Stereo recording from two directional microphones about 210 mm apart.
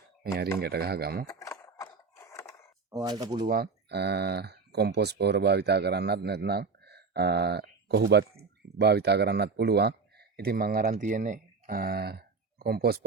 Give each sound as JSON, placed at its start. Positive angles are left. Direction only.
{"t": 0.2, "sound": "speech", "side_deg": -50}
{"t": 1.4, "sound": "a sound", "side_deg": 15}
{"t": 2.9, "sound": "speech", "side_deg": -15}
{"t": 3.4, "sound": "speech", "side_deg": -45}